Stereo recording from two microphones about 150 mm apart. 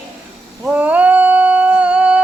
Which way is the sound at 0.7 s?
10° right (ahead or behind).